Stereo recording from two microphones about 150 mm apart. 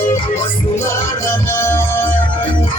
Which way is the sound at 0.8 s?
15° left (ahead or behind).